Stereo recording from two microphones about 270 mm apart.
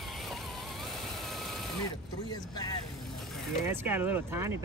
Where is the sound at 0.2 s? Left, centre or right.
Centre.